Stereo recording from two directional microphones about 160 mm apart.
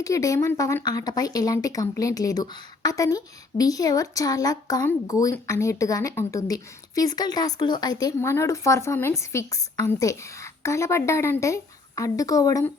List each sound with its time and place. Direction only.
0.0 s speech: 20° left (ahead or behind)